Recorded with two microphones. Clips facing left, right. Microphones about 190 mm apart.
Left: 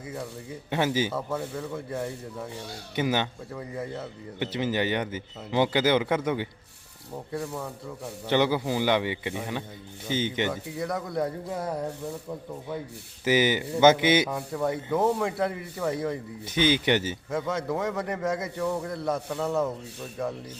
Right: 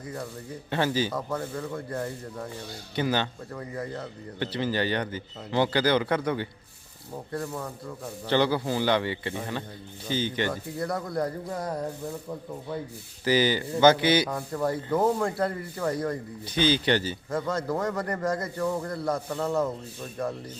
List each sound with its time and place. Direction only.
0.7 s a man's voice: 15° left (ahead or behind)
1.1 s a man's voice: 5° left (ahead or behind)
2.9 s a man's voice: 15° left (ahead or behind)
3.5 s a man's voice: 5° left (ahead or behind)
4.4 s a man's voice: 15° left (ahead or behind)
10.5 s a man's voice: centre (ahead or behind)
13.2 s speech: 20° left (ahead or behind)
14.3 s a man's voice: 5° left (ahead or behind)
16.6 s a man's voice: 20° left (ahead or behind)
17.3 s a man's voice: centre (ahead or behind)